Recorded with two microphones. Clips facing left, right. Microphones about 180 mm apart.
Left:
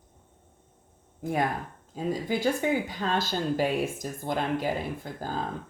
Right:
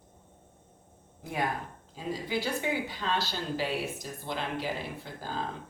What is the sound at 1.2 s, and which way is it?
Speech, 45° left (ahead or behind).